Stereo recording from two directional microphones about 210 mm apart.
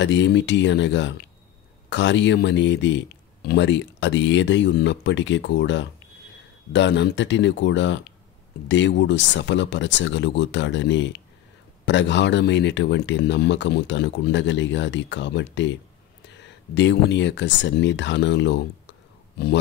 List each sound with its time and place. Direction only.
0.0 s speech: 60° left (ahead or behind)